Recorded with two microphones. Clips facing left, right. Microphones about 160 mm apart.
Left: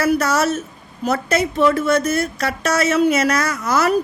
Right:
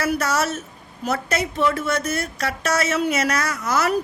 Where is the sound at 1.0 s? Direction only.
35° left (ahead or behind).